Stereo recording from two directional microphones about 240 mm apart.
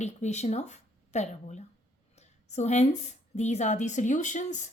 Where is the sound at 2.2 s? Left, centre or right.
Left.